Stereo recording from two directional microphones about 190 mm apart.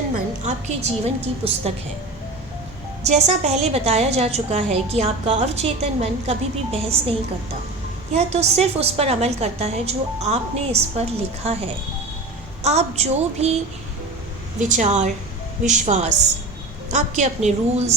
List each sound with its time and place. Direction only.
0.4 s a woman's voice: 35° right (ahead or behind)
3.0 s a woman's voice: 35° right (ahead or behind)
8.1 s a woman's voice: 35° right (ahead or behind)
14.6 s a woman's voice: 40° right (ahead or behind)